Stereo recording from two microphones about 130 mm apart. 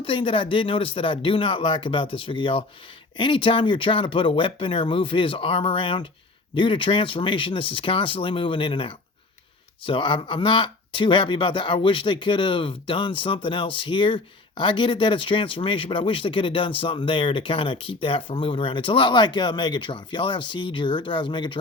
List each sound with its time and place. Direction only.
0.0 s speech: 40° left (ahead or behind)